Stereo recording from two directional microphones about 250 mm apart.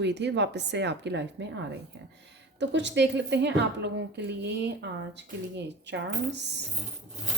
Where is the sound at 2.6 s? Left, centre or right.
Right.